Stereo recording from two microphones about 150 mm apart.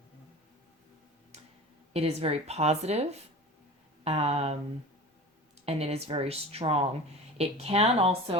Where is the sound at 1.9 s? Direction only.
45° right (ahead or behind).